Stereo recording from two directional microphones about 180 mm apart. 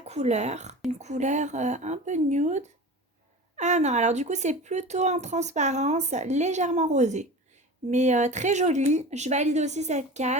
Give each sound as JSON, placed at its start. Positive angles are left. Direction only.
{"t": 0.0, "sound": "speech", "side_deg": -40}